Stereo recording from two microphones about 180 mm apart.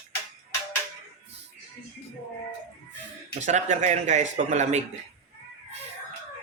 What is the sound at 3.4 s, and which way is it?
Speech, 45° right (ahead or behind).